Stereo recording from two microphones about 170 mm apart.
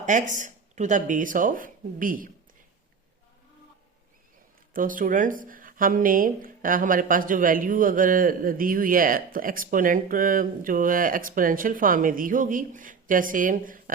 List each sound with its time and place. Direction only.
0.0 s speech: 45° right (ahead or behind)
4.7 s speech: 55° right (ahead or behind)